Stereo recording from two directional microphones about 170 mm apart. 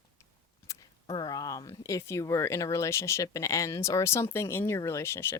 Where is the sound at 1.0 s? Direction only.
25° left (ahead or behind).